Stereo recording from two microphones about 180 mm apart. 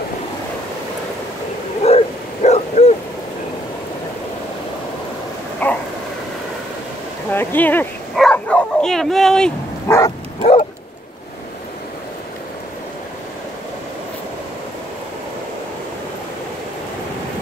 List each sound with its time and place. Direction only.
1.8 s bow-wow: 35° left (ahead or behind)
5.6 s dog: 10° left (ahead or behind)
7.2 s bow-wow: 10° left (ahead or behind)
9.8 s bow-wow: 15° left (ahead or behind)
10.4 s dog: 35° left (ahead or behind)